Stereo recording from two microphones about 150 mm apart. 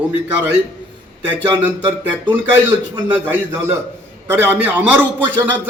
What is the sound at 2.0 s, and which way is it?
Speech, 10° right (ahead or behind).